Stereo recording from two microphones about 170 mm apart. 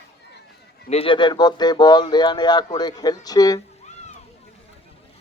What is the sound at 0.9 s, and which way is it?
Speech, 35° left (ahead or behind).